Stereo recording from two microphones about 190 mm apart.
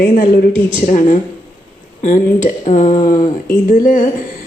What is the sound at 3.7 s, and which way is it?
Speech, 45° left (ahead or behind).